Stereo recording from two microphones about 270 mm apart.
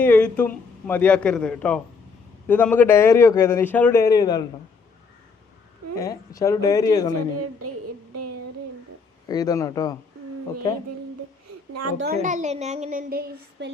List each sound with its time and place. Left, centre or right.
0.0 s a man's voice: centre
6.0 s a man's voice: centre
7.6 s a sound: right
9.3 s a man's voice: centre
11.7 s a child's voice: right
11.9 s a woman's voice: right